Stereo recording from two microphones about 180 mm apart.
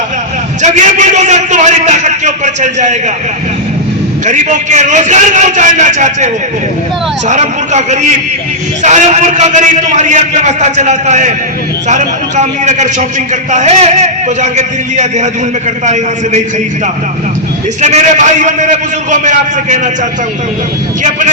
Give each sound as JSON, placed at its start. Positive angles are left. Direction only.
{"t": 0.6, "sound": "a sound", "side_deg": -40}
{"t": 4.3, "sound": "a man's voice", "side_deg": -40}
{"t": 17.7, "sound": "a man's voice", "side_deg": -40}